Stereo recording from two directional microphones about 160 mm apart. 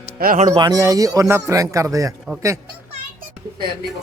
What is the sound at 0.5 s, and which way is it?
Speech, 25° right (ahead or behind).